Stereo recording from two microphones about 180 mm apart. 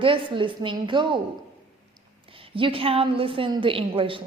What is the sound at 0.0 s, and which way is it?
A woman's voice, 30° right (ahead or behind).